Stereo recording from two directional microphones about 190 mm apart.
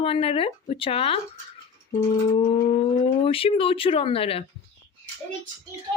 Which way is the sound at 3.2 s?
30° left (ahead or behind).